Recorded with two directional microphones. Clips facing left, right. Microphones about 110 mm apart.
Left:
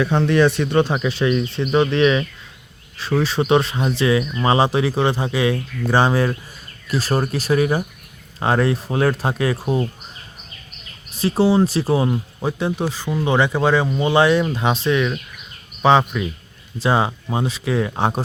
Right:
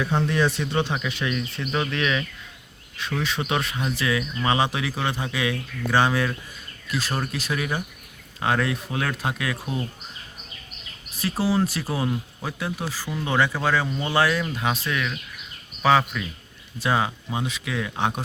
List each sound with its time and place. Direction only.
0.0 s speech: 80° left; by 0.9 s 60° left (ahead or behind)
0.9 s speech: 35° left (ahead or behind)
11.2 s speech: 30° left (ahead or behind)